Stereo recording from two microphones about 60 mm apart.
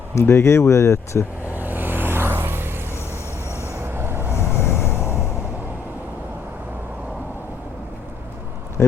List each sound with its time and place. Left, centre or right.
0.1 s speech: left
1.5 s vehicle: right
3.8 s train: right
4.4 s vehicle: left
8.8 s a sound: left